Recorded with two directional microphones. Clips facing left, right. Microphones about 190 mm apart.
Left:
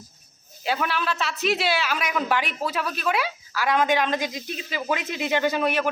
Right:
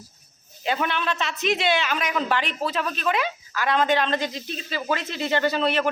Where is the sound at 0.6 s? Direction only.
5° left (ahead or behind).